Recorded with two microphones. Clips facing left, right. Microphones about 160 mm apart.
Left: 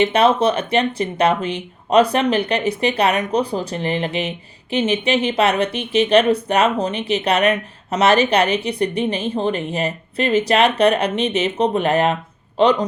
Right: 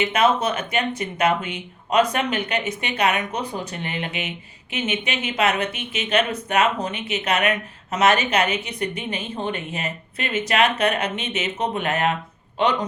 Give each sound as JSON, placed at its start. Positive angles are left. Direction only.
{"t": 0.0, "sound": "speech", "side_deg": 30}